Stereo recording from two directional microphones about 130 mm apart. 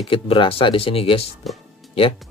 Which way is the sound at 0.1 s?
40° left (ahead or behind).